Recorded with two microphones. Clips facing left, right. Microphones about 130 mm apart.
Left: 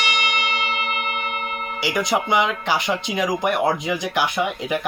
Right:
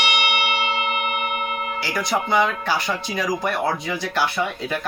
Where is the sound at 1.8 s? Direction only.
20° left (ahead or behind).